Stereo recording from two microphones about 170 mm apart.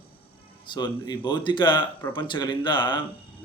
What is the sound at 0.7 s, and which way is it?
A man's voice, 25° left (ahead or behind).